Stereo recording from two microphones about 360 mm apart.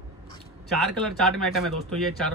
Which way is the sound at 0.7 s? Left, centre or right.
Centre.